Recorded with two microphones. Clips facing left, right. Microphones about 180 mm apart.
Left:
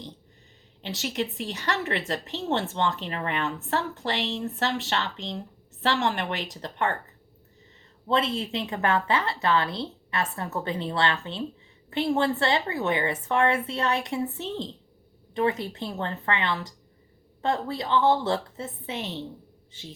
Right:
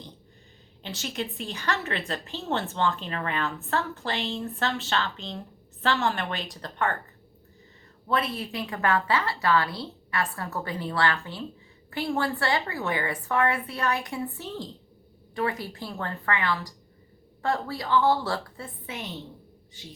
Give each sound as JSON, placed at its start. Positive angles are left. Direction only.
{"t": 1.0, "sound": "a woman's voice", "side_deg": 20}
{"t": 8.0, "sound": "a woman's voice", "side_deg": 25}